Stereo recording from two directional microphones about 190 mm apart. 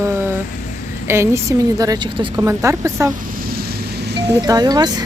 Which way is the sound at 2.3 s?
15° right (ahead or behind).